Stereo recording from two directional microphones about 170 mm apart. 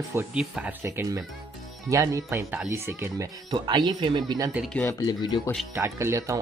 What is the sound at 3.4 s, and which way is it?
Speech, 25° right (ahead or behind).